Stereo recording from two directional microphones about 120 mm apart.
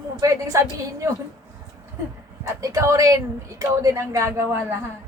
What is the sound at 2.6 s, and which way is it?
A woman's voice, 25° right (ahead or behind).